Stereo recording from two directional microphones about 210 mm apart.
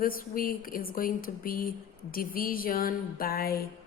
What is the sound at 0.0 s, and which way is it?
A woman's voice, 40° left (ahead or behind).